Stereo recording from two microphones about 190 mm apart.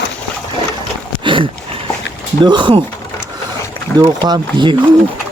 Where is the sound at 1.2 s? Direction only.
25° right (ahead or behind).